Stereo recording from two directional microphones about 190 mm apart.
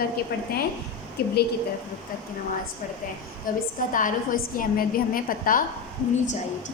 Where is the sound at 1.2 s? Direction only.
55° left (ahead or behind).